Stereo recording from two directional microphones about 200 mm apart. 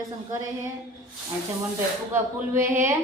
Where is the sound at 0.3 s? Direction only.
15° right (ahead or behind).